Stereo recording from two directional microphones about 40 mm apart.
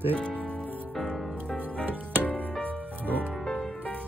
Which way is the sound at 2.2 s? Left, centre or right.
Left.